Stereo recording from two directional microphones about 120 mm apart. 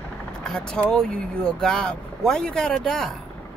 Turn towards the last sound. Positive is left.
turn(degrees=5)  # may be behind; listen again after turning